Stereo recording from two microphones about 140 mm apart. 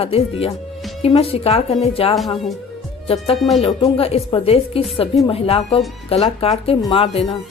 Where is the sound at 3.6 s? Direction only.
45° left (ahead or behind).